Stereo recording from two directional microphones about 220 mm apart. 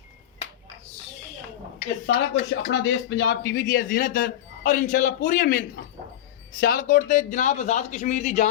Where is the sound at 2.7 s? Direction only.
50° left (ahead or behind).